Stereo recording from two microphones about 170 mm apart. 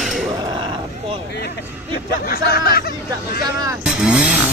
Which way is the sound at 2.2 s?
65° left (ahead or behind).